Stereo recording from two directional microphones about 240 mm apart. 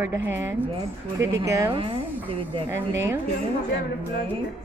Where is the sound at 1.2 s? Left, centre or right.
Centre.